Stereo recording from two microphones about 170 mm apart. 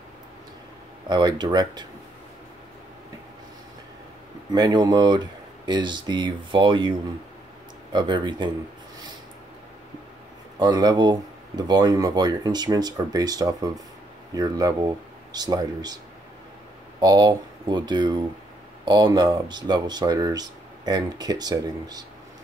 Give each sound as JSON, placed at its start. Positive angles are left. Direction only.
{"t": 1.0, "sound": "speech", "side_deg": -25}
{"t": 4.6, "sound": "speech", "side_deg": -25}
{"t": 10.6, "sound": "speech", "side_deg": -25}
{"t": 17.0, "sound": "speech", "side_deg": -25}